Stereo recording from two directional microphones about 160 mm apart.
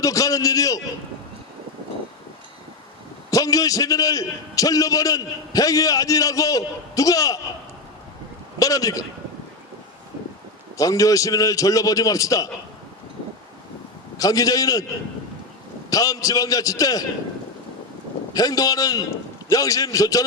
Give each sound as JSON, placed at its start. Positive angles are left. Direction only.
{"t": 0.0, "sound": "a man's voice", "side_deg": 20}
{"t": 3.2, "sound": "a man's voice", "side_deg": 20}
{"t": 8.5, "sound": "speech", "side_deg": 20}
{"t": 10.8, "sound": "a man's voice", "side_deg": 20}
{"t": 14.2, "sound": "a man's voice", "side_deg": 20}
{"t": 15.9, "sound": "a man's voice", "side_deg": 20}
{"t": 18.3, "sound": "a man's voice", "side_deg": 20}